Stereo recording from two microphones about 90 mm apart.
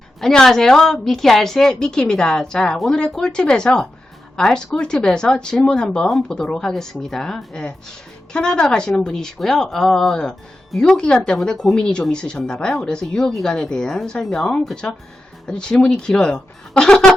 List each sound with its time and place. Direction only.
0.2 s a woman's voice: 5° left (ahead or behind)